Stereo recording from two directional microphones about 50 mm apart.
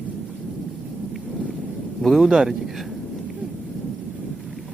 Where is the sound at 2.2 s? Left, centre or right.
Centre.